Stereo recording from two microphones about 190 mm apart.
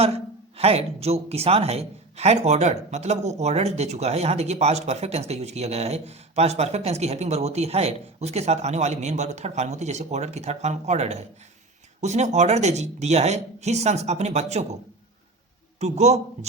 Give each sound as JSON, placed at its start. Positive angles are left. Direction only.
{"t": 0.5, "sound": "a man's voice", "side_deg": -30}
{"t": 15.8, "sound": "a man's voice", "side_deg": -35}